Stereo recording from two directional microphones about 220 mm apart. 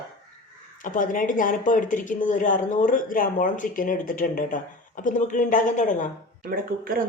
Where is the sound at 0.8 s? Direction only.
35° left (ahead or behind).